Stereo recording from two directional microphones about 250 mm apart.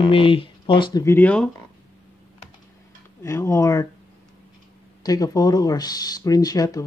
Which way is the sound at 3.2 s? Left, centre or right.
Centre.